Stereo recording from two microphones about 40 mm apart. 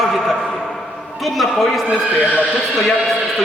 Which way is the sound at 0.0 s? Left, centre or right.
Centre.